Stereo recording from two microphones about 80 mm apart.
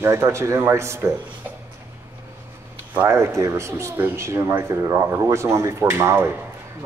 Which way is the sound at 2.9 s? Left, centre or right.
Right.